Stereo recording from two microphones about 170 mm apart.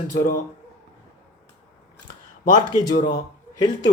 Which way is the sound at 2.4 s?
50° left (ahead or behind).